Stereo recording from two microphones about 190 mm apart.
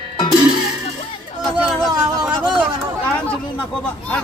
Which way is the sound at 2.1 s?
20° right (ahead or behind).